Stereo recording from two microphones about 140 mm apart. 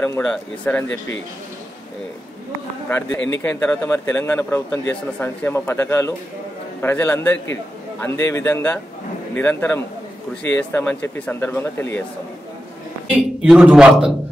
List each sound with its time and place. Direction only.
0.2 s a man's voice: 5° left (ahead or behind)
2.9 s speech: 15° left (ahead or behind)
13.4 s a man's voice: 5° right (ahead or behind)